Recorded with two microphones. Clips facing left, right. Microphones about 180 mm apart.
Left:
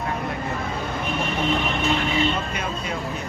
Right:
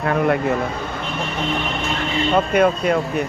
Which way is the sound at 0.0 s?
75° right (ahead or behind).